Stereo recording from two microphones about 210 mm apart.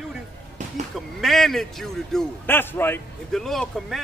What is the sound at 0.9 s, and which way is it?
A man's voice, centre (ahead or behind).